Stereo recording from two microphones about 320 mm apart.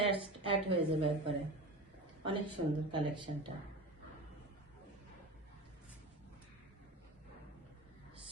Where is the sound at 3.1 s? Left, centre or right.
Centre.